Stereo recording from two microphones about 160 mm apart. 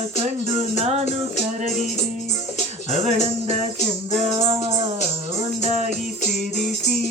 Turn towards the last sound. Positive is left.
turn(degrees=-45)  # may be behind; listen again after turning